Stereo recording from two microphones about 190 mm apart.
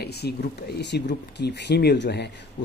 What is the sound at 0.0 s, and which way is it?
Speech, 60° left (ahead or behind).